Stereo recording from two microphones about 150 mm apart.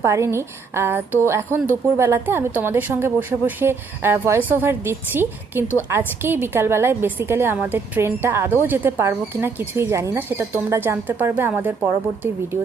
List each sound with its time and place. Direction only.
0.0 s a woman's voice: 20° right (ahead or behind)